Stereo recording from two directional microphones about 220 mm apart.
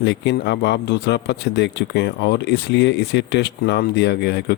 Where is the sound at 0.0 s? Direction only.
50° left (ahead or behind).